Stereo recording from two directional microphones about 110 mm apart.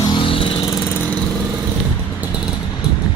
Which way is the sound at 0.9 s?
15° left (ahead or behind).